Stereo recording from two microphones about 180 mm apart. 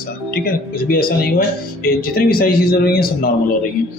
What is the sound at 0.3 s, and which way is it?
Speech, 55° left (ahead or behind).